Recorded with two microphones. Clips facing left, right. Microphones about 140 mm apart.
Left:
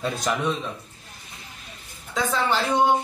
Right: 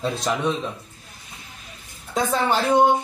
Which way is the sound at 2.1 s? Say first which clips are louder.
Right 2 dB; 45° right (ahead or behind).